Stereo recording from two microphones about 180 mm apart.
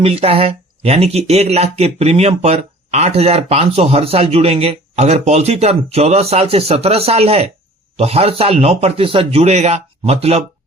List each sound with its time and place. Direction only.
0.0 s speech: 30° right (ahead or behind)